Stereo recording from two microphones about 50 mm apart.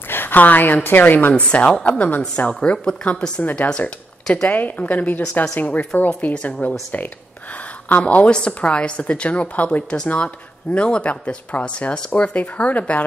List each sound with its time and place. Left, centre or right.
0.1 s a sound: left
0.8 s a woman's voice: left
1.3 s a woman's voice: left
7.9 s speech: left